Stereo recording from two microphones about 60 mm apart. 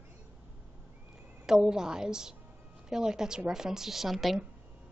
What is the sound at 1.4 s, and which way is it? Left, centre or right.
A woman's voice, centre.